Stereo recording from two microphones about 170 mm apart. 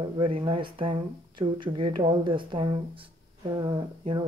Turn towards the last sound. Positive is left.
turn(degrees=-25)  # may be behind; listen again after turning